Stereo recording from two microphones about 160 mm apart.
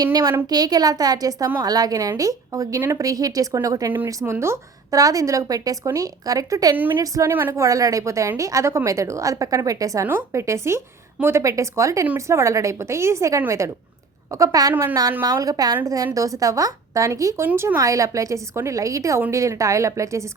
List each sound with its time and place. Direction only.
0.0 s a woman's voice: 25° right (ahead or behind)